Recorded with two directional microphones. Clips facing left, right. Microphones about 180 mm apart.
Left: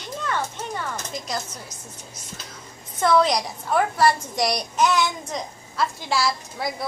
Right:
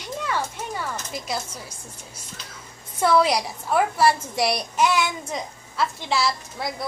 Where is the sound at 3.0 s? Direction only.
5° right (ahead or behind).